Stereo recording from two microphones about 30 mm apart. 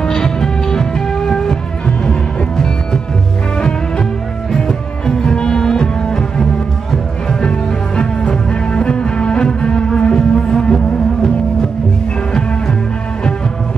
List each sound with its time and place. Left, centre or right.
0.0 s music: left